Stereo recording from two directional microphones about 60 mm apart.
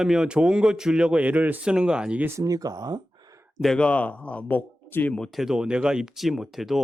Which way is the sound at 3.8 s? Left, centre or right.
Left.